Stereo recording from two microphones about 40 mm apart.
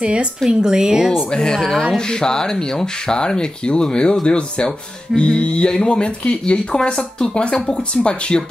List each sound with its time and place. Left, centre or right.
0.0 s a woman's voice: right
1.3 s speech: centre